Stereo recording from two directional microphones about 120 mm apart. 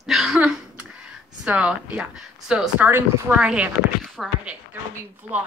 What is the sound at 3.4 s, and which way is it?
Speech, 5° right (ahead or behind).